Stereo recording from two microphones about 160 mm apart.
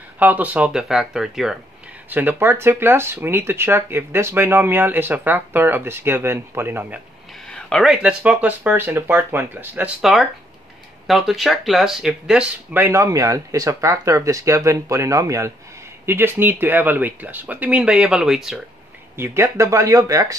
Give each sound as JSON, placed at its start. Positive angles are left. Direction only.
{"t": 0.2, "sound": "speech", "side_deg": -10}
{"t": 7.4, "sound": "speech", "side_deg": 5}
{"t": 19.1, "sound": "speech", "side_deg": -15}